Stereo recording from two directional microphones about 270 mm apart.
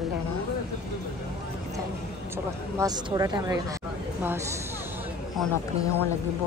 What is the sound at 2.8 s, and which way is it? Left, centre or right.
Speech, centre.